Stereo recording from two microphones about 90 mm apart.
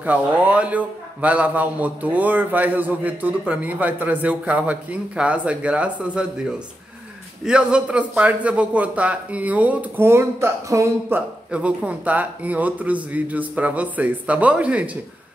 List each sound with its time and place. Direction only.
0.0 s a man's voice: 15° right (ahead or behind)
7.4 s a man's voice: 10° right (ahead or behind)
10.0 s speech: 30° right (ahead or behind)
11.1 s a man's voice: 15° right (ahead or behind)